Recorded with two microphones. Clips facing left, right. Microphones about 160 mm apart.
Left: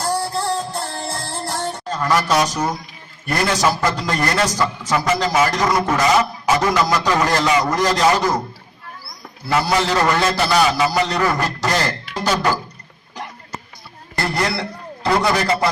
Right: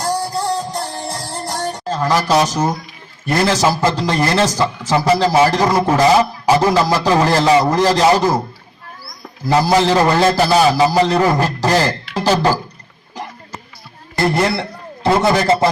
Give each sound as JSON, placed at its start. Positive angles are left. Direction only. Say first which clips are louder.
{"t": 0.0, "sound": "music", "louder": "right 2 dB", "side_deg": -15}
{"t": 1.9, "sound": "a man's voice", "louder": "right 3 dB", "side_deg": -25}
{"t": 9.5, "sound": "a man's voice", "louder": "right 5 dB", "side_deg": -30}
{"t": 14.2, "sound": "a man's voice", "louder": "right 5 dB", "side_deg": -20}